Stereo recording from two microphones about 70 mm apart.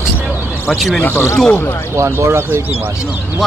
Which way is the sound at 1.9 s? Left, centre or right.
Right.